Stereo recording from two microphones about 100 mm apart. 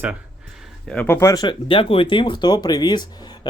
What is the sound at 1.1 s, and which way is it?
Speech, 30° left (ahead or behind).